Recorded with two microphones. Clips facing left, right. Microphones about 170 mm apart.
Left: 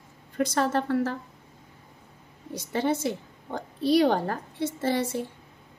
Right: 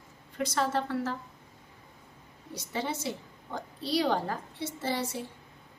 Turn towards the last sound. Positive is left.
turn(degrees=50)  # may be behind; listen again after turning